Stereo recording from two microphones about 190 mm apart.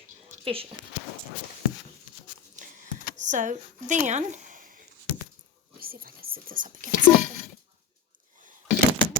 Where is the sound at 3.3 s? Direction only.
40° right (ahead or behind).